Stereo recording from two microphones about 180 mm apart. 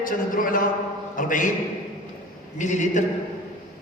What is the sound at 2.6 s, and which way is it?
Speech, 40° left (ahead or behind).